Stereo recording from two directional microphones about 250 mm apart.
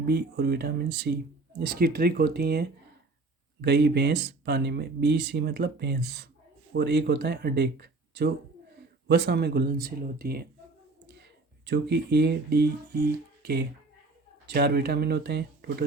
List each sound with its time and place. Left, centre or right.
0.0 s speech: right